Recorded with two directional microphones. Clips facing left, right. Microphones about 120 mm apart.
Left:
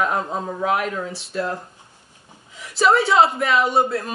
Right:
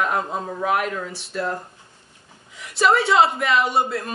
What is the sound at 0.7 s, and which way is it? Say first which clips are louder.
Speech: even; centre (ahead or behind).